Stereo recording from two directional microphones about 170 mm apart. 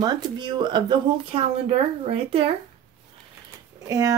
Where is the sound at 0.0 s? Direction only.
25° right (ahead or behind).